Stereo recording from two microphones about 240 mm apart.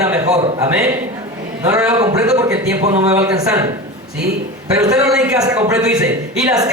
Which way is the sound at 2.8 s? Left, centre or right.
Right.